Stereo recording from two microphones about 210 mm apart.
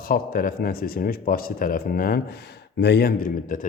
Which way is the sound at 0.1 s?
40° left (ahead or behind).